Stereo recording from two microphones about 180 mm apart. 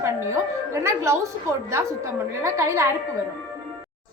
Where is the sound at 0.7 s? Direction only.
15° right (ahead or behind).